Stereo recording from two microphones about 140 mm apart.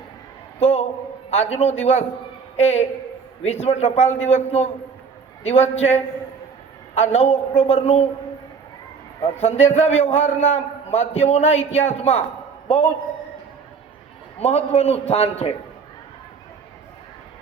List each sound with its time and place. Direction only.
0.6 s a man's voice: 50° left (ahead or behind)
9.2 s a man's voice: 50° left (ahead or behind)
14.3 s a man's voice: 50° left (ahead or behind)